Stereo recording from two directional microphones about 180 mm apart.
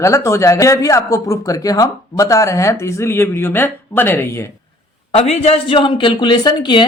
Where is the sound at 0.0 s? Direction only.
15° left (ahead or behind).